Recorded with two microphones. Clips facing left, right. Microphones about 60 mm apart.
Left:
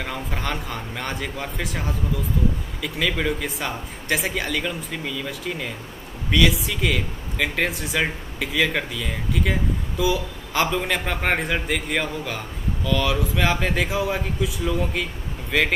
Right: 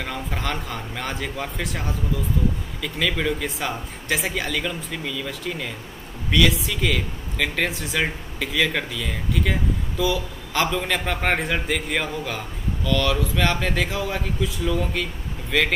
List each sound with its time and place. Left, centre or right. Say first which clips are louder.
0.0 s speech: even; centre